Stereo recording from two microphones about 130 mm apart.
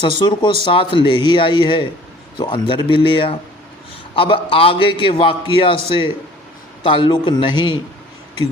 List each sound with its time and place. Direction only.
0.0 s a man's voice: 40° left (ahead or behind)